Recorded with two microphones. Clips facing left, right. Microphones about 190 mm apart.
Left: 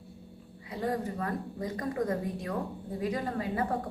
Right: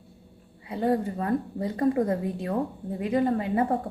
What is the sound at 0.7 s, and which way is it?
A woman's voice, 25° right (ahead or behind).